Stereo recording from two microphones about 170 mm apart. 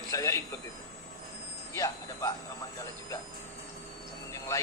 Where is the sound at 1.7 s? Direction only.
20° left (ahead or behind).